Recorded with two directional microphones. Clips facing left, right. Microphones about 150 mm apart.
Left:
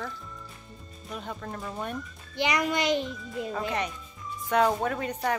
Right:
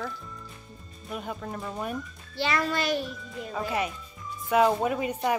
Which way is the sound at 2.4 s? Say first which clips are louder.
Left 1 dB; 15° left (ahead or behind).